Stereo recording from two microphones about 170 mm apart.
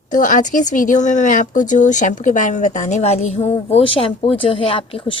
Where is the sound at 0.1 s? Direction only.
50° left (ahead or behind).